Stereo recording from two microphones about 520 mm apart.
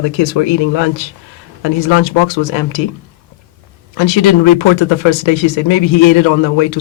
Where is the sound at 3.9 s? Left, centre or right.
Left.